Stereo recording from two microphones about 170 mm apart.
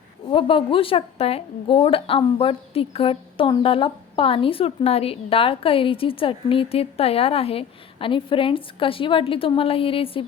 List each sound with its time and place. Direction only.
0.3 s a woman's voice: 30° left (ahead or behind)